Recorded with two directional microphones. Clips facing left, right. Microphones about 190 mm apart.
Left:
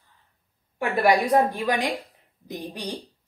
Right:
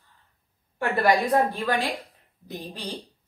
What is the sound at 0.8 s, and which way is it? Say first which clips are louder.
Speech: left 1 dB; 15° left (ahead or behind).